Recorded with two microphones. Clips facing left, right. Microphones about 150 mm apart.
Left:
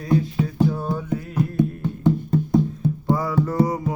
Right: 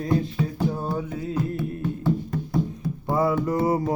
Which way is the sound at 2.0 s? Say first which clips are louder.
Left 8 dB; 25° left (ahead or behind).